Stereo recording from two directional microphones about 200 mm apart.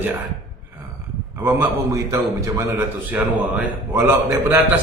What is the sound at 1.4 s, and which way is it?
A man's voice, 10° right (ahead or behind).